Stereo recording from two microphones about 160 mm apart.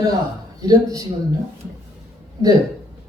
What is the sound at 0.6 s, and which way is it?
Speech, 20° right (ahead or behind).